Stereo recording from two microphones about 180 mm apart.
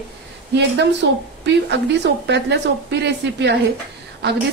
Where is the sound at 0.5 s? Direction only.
75° right (ahead or behind).